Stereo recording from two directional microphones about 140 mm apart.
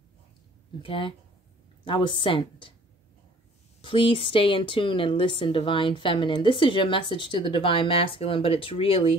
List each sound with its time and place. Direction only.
0.8 s a woman's voice: 40° left (ahead or behind)
3.8 s a woman's voice: 40° left (ahead or behind)